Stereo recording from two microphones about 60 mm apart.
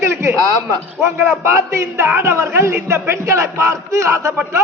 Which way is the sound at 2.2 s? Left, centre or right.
Right.